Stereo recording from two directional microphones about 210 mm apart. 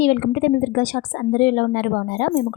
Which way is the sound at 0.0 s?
45° left (ahead or behind).